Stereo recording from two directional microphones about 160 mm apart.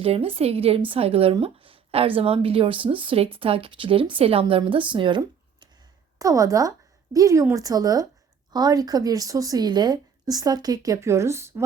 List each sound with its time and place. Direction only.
0.0 s a woman's voice: 35° right (ahead or behind); by 11.6 s 15° right (ahead or behind)